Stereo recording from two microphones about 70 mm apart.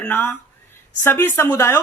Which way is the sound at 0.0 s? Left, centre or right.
Left.